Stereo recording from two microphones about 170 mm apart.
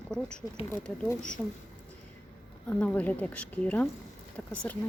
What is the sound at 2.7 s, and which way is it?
Speech, 10° left (ahead or behind).